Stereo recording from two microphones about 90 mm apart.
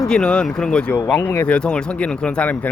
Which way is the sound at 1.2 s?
30° left (ahead or behind).